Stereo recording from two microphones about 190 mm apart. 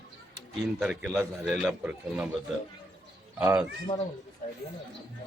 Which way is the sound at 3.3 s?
15° right (ahead or behind).